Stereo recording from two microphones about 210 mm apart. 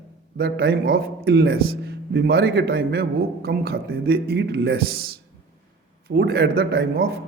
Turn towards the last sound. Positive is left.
turn(degrees=-50)  # may be behind; listen again after turning